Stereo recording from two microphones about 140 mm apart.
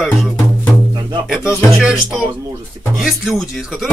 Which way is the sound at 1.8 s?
5° right (ahead or behind).